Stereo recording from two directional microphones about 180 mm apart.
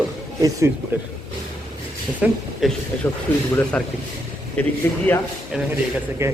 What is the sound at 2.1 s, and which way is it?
Speech, centre (ahead or behind).